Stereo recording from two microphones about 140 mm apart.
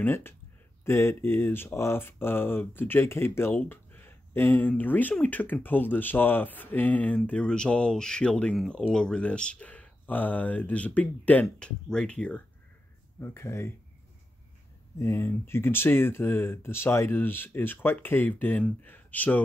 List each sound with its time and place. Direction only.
0.0 s speech: 15° left (ahead or behind)
15.0 s speech: 20° left (ahead or behind)